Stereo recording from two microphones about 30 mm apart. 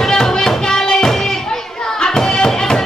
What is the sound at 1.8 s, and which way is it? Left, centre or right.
Hands, left.